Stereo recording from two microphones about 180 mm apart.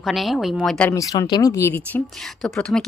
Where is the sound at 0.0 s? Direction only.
Centre (ahead or behind).